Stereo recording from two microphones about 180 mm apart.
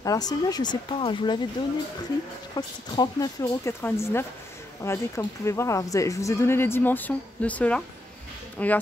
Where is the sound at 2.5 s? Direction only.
25° left (ahead or behind).